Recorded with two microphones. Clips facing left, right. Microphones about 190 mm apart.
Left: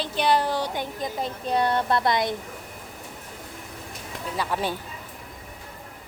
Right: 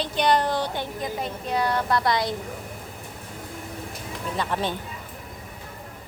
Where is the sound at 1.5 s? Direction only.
25° left (ahead or behind).